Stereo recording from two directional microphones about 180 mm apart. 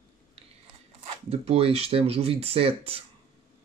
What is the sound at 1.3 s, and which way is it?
Speech, 35° right (ahead or behind).